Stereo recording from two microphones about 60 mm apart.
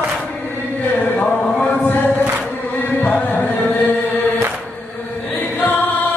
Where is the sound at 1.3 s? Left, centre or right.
Centre.